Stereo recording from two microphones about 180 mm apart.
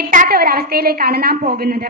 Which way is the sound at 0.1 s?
50° right (ahead or behind).